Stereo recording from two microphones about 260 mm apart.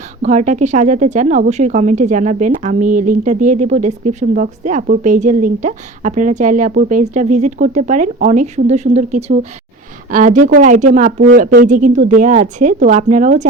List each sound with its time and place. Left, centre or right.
0.2 s speech: right